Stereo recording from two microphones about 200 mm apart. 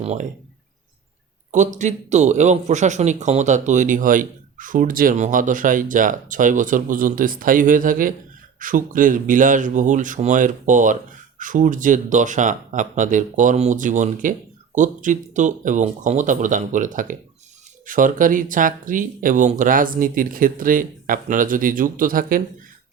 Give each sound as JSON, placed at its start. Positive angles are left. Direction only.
{"t": 0.0, "sound": "speech", "side_deg": -35}
{"t": 1.5, "sound": "speech", "side_deg": -40}